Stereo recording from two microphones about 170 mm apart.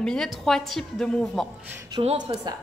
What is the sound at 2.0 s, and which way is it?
Speech, 30° right (ahead or behind).